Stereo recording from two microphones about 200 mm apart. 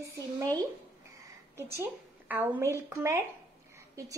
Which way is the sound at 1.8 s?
10° right (ahead or behind).